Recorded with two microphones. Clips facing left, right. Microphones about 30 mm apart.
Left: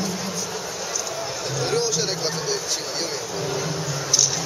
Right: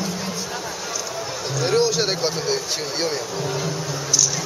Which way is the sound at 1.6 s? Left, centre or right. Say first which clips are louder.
Right 5 dB; right.